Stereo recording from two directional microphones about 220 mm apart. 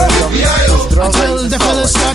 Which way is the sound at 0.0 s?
Centre (ahead or behind).